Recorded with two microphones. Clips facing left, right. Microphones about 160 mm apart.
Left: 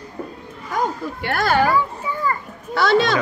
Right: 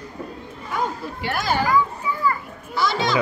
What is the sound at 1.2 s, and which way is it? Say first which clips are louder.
Speech: left 4 dB; 55° left (ahead or behind).